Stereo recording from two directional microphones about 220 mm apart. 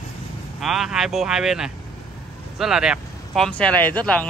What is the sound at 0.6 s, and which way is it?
Speech, centre (ahead or behind).